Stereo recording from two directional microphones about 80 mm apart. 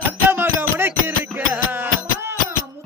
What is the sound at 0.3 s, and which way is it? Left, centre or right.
Music, right.